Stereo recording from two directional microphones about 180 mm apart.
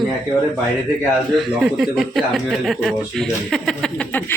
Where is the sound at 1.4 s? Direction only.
Centre (ahead or behind).